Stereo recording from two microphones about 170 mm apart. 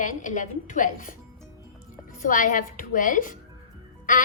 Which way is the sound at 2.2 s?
50° left (ahead or behind).